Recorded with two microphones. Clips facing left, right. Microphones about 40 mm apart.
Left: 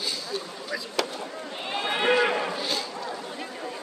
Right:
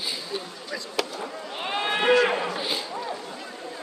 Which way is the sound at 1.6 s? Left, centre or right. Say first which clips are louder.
Right 2 dB; centre.